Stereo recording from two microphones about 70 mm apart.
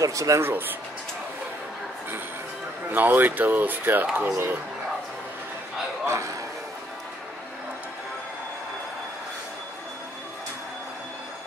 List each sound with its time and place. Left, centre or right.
0.0 s speech: right
0.4 s speech: right
2.9 s speech: right
6.0 s speech: right